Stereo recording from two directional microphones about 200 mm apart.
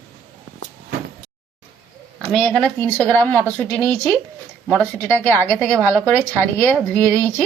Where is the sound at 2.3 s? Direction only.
5° left (ahead or behind).